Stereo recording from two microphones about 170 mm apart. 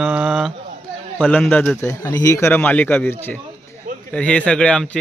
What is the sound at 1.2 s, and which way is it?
Speech, centre (ahead or behind).